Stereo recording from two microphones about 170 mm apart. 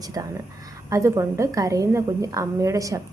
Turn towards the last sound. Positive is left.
turn(degrees=-20)  # may be behind; listen again after turning